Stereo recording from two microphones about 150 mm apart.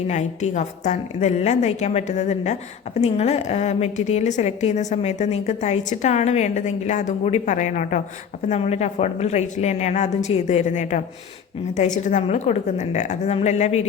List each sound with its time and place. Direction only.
0.1 s a woman's voice: 50° left (ahead or behind)
8.4 s a woman's voice: 45° left (ahead or behind)